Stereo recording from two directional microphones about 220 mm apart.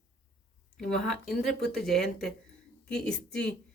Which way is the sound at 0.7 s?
Centre (ahead or behind).